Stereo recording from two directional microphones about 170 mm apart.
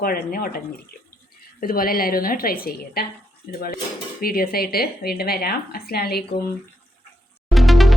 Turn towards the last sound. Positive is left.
turn(degrees=0)  # may be behind; listen again after turning